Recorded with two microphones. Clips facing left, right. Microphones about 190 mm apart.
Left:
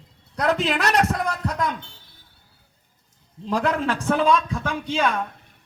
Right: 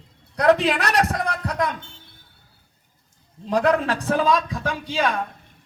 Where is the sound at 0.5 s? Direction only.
35° right (ahead or behind).